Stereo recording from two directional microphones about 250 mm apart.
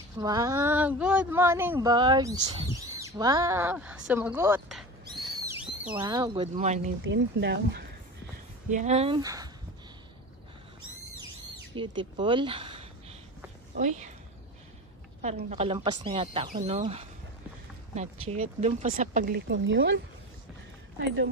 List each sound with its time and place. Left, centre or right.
0.2 s speech: centre
5.0 s owl: centre
5.9 s speech: centre
7.0 s speech: right
8.6 s speech: right
11.7 s speech: centre
15.5 s speech: right
18.4 s speech: right